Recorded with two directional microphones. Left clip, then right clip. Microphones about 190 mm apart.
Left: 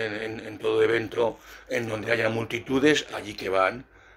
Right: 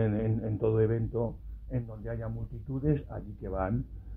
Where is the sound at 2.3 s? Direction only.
40° left (ahead or behind).